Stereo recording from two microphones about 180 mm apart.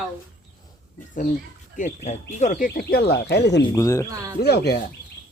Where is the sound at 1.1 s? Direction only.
50° left (ahead or behind); by 3.6 s 70° left (ahead or behind).